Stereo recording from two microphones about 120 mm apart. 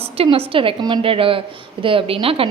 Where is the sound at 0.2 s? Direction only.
50° right (ahead or behind).